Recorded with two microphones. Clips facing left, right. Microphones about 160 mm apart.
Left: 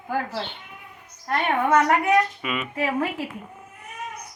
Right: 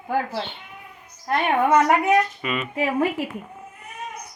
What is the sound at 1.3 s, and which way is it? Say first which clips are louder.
Speech: right 2 dB; 15° right (ahead or behind).